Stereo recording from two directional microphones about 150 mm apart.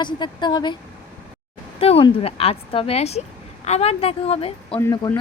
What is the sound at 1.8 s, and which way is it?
Speech, 40° left (ahead or behind).